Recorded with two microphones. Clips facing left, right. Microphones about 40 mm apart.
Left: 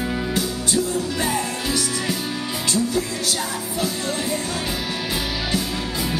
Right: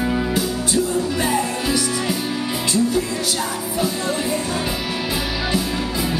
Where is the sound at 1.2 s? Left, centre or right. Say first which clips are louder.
Right 3 dB; centre.